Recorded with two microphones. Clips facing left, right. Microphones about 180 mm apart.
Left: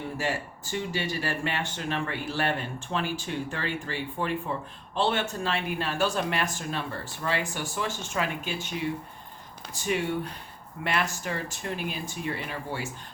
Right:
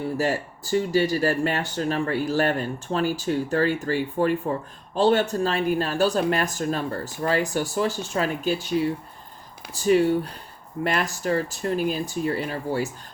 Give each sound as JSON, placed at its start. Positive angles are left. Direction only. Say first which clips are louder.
{"t": 0.2, "sound": "speech", "louder": "right 6 dB", "side_deg": -40}